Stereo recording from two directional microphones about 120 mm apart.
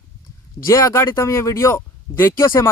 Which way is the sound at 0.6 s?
25° left (ahead or behind).